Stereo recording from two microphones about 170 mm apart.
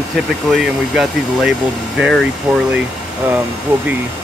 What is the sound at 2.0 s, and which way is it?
Speech, centre (ahead or behind).